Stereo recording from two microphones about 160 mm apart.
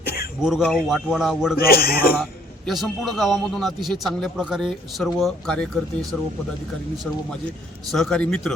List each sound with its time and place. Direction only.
0.4 s a man's voice: 5° right (ahead or behind)
1.5 s speech: 70° left (ahead or behind)
2.6 s a man's voice: centre (ahead or behind)
7.9 s a man's voice: 5° left (ahead or behind)